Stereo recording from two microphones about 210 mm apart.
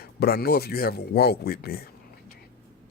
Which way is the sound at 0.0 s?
45° left (ahead or behind).